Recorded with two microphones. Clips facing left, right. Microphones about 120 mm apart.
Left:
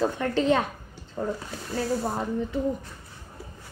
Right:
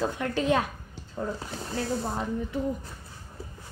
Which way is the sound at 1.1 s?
Centre (ahead or behind).